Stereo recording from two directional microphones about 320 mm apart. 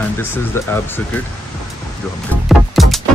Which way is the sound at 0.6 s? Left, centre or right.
Centre.